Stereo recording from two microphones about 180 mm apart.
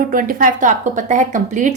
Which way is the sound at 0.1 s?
50° right (ahead or behind).